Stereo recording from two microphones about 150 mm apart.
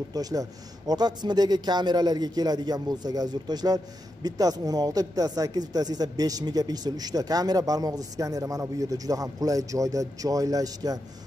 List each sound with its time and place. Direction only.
0.1 s a man's voice: 25° right (ahead or behind)